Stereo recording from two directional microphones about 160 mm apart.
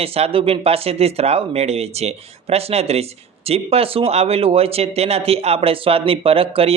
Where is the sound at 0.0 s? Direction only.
35° right (ahead or behind).